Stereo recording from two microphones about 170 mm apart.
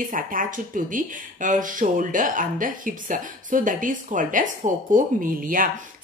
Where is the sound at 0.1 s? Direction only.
55° right (ahead or behind).